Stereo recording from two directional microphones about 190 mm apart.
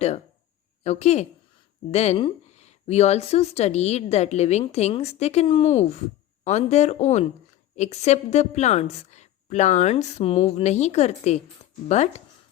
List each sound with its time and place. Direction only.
0.9 s speech: 35° left (ahead or behind)